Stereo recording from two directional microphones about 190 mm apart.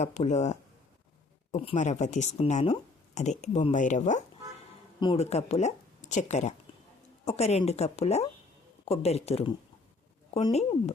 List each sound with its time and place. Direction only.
0.0 s speech: 35° left (ahead or behind)
4.9 s speech: 30° left (ahead or behind)